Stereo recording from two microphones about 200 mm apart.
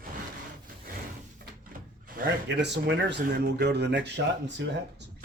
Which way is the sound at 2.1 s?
50° right (ahead or behind).